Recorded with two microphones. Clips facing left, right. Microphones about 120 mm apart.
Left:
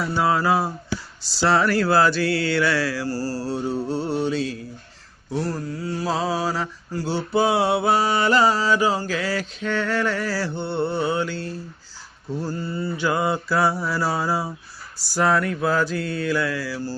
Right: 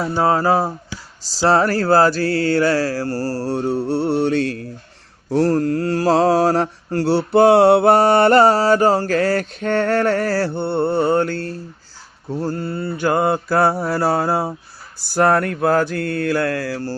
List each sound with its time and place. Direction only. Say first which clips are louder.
0.1 s speech: right 4 dB; 40° right (ahead or behind)
1.2 s mantra: right 4 dB; 40° right (ahead or behind); by 4.7 s 65° right (ahead or behind)
5.3 s mantra: right 10 dB; 85° right; by 16.9 s 60° right (ahead or behind)